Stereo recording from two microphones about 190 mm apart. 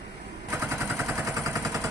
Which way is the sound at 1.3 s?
15° right (ahead or behind).